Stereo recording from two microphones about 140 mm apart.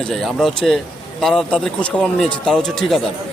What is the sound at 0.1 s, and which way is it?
Speech, centre (ahead or behind).